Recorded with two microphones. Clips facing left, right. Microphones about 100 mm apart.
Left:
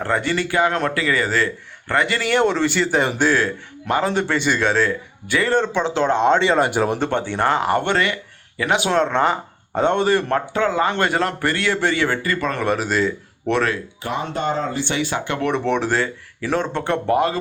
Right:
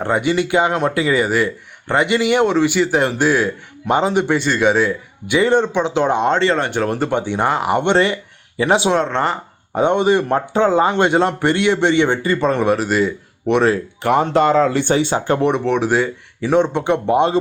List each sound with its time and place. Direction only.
0.0 s speech: 15° right (ahead or behind)
4.4 s speech: centre (ahead or behind)
4.6 s speech: 10° right (ahead or behind)
6.2 s speech: 5° left (ahead or behind)
7.0 s speech: 15° right (ahead or behind)
7.8 s speech: 25° right (ahead or behind)
9.0 s speech: centre (ahead or behind)
9.7 s speech: 15° right (ahead or behind)
10.5 s a man's voice: 30° right (ahead or behind)
12.6 s speech: centre (ahead or behind)
14.0 s speech: 65° right (ahead or behind); by 14.8 s 85° right
14.8 s speech: 30° right (ahead or behind)
15.5 s speech: 5° right (ahead or behind)
16.4 s speech: 20° right (ahead or behind)